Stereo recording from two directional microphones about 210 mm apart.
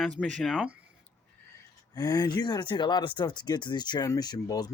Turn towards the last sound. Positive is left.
turn(degrees=15)  # may be behind; listen again after turning